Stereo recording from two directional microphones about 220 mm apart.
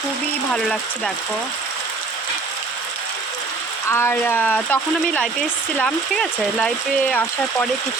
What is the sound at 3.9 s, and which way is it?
Speech, 10° left (ahead or behind).